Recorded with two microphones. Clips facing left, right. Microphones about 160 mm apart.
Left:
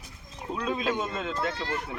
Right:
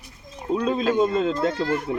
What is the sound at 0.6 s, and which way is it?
A man's voice, 30° right (ahead or behind).